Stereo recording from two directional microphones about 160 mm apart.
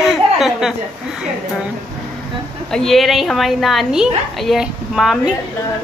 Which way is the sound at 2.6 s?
5° left (ahead or behind).